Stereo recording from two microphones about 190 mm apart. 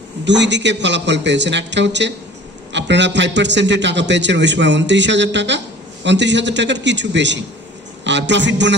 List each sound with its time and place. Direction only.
0.3 s a man's voice: 70° right (ahead or behind)